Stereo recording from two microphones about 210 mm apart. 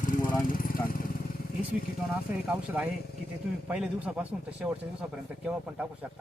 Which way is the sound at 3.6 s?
5° right (ahead or behind).